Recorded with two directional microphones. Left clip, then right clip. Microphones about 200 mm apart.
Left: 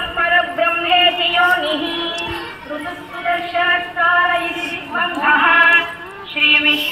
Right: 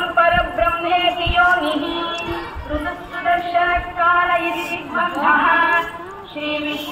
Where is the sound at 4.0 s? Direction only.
55° left (ahead or behind).